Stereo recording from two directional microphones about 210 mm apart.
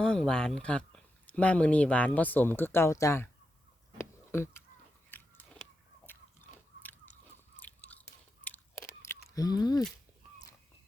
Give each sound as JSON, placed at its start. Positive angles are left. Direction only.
{"t": 0.0, "sound": "speech", "side_deg": 5}
{"t": 3.9, "sound": "a sound", "side_deg": 10}
{"t": 5.1, "sound": "biting", "side_deg": 10}
{"t": 5.6, "sound": "a sound", "side_deg": 5}
{"t": 6.1, "sound": "biting", "side_deg": 10}
{"t": 7.6, "sound": "biting", "side_deg": 5}